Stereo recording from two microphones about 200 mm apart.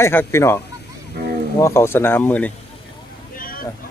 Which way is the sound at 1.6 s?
15° left (ahead or behind).